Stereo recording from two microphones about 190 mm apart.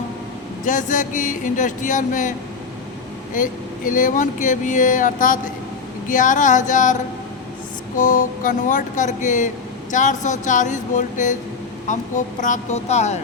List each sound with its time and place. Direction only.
0.6 s speech: 40° left (ahead or behind)
3.3 s speech: 45° left (ahead or behind)
7.9 s speech: 45° left (ahead or behind)